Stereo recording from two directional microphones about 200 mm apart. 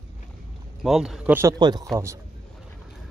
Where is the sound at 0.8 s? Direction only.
Centre (ahead or behind).